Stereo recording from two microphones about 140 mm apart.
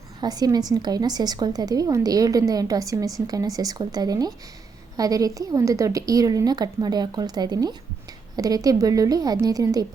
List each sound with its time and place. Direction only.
0.2 s a woman's voice: 30° right (ahead or behind)